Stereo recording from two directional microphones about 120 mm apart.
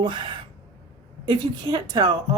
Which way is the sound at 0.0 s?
45° right (ahead or behind).